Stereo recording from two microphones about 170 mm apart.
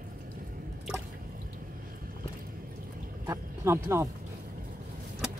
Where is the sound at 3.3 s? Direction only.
15° right (ahead or behind).